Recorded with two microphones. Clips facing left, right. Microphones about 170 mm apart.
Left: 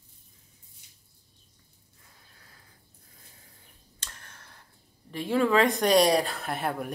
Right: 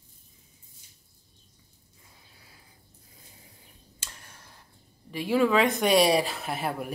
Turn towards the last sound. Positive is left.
turn(degrees=-5)  # may be behind; listen again after turning